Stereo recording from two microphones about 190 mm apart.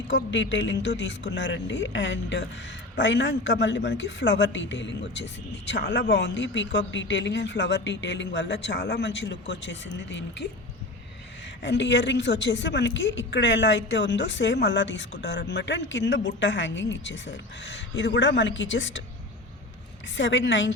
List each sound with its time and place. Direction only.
0.1 s speech: 75° left (ahead or behind)
11.6 s speech: 70° left (ahead or behind)
20.1 s speech: 75° left (ahead or behind)